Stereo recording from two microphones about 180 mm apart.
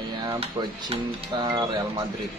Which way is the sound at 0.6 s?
20° right (ahead or behind).